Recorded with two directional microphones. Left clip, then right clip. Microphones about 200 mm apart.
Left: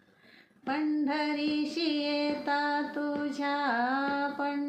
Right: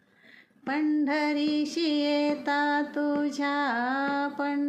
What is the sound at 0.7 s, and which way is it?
Female singing, 10° right (ahead or behind).